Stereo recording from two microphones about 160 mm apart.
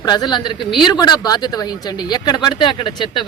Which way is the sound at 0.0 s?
25° left (ahead or behind).